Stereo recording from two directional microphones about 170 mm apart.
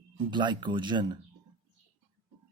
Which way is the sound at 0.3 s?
25° right (ahead or behind).